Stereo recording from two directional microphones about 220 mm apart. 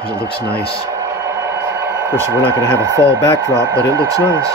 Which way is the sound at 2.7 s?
15° right (ahead or behind).